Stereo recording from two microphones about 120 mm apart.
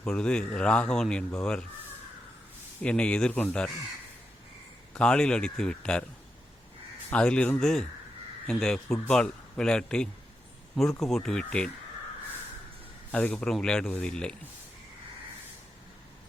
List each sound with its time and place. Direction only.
0.0 s a man's voice: 5° left (ahead or behind)
2.8 s a man's voice: 10° left (ahead or behind)
4.9 s a man's voice: 10° left (ahead or behind)
7.1 s a man's voice: 10° left (ahead or behind)
13.1 s a man's voice: 10° left (ahead or behind)